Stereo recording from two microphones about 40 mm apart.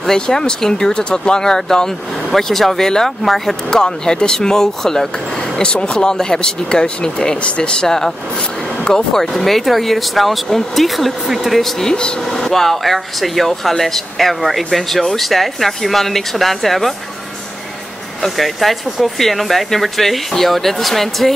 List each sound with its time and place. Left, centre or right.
0.0 s speech: centre
3.7 s speech: centre
5.6 s speech: left; by 11.7 s centre
11.8 s speech: centre
12.3 s speech: centre
18.2 s speech: centre